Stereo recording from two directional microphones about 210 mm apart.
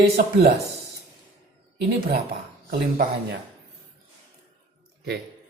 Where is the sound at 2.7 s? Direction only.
45° right (ahead or behind).